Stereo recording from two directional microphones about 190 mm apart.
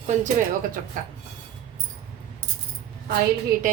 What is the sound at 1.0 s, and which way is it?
Speech, 45° right (ahead or behind).